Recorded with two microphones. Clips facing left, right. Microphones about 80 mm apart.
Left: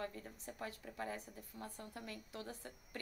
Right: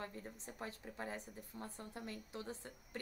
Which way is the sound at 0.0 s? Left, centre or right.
Right.